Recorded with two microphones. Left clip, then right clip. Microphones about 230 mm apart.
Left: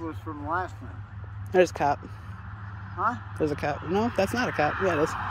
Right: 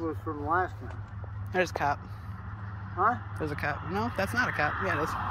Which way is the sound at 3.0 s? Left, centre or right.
Left.